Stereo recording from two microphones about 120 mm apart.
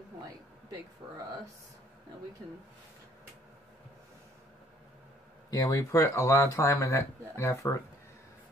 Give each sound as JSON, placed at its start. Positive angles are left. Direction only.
{"t": 5.5, "sound": "speech", "side_deg": 30}